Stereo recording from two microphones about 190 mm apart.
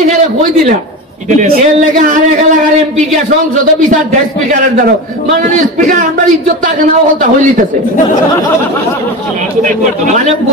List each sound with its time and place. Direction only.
1.3 s speech: 45° right (ahead or behind)
4.5 s a man's voice: 45° right (ahead or behind)